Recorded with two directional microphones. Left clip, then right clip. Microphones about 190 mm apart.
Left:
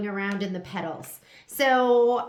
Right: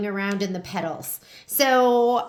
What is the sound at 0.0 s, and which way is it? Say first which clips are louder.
Speech: right 3 dB; 45° right (ahead or behind).